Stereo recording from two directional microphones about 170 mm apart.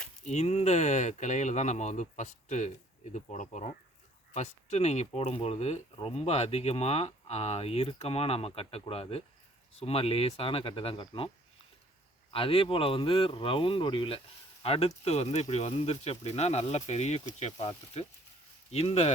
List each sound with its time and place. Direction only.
0.3 s speech: 40° left (ahead or behind)
12.3 s speech: 35° left (ahead or behind)